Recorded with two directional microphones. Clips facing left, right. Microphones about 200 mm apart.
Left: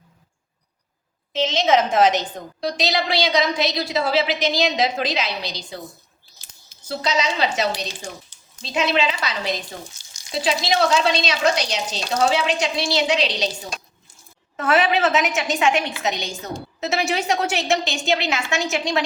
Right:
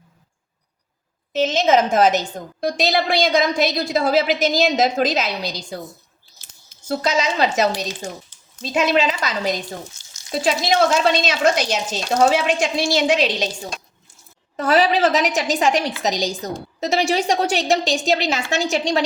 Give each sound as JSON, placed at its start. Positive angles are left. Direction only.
{"t": 1.3, "sound": "a woman's voice", "side_deg": -50}
{"t": 6.8, "sound": "a woman's voice", "side_deg": -45}
{"t": 14.5, "sound": "a woman's voice", "side_deg": -35}